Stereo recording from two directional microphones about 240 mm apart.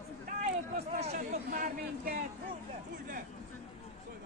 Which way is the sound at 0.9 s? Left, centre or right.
Right.